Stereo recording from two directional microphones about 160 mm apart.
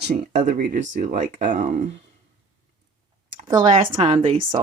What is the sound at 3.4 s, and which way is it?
Speech, 30° right (ahead or behind).